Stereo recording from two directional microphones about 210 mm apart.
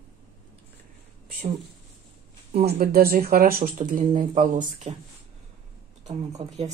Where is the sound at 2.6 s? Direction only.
45° right (ahead or behind).